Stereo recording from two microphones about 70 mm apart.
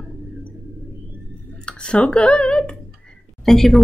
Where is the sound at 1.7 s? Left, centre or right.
Centre.